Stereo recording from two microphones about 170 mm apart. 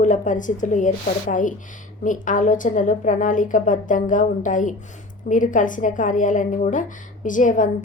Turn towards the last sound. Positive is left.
turn(degrees=50)  # may be behind; listen again after turning